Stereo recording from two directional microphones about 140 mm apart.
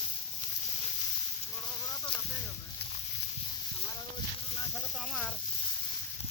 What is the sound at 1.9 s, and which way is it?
Boat, 30° left (ahead or behind).